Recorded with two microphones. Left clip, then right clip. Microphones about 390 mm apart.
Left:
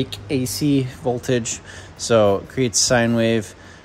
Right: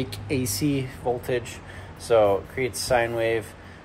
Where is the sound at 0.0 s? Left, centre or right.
Left.